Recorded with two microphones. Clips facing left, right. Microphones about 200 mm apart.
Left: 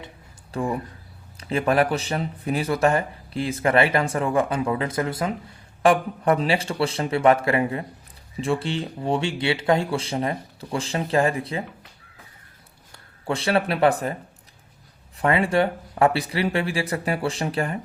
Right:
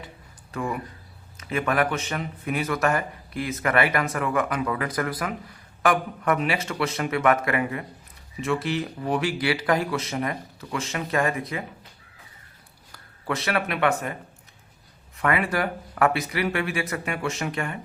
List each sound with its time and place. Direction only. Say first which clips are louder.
0.5 s speech: left 3 dB; 30° left (ahead or behind)
13.2 s speech: left 4 dB; 30° left (ahead or behind)
15.2 s speech: left 4 dB; 30° left (ahead or behind)